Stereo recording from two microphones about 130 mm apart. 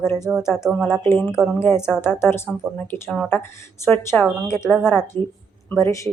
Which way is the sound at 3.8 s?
15° left (ahead or behind).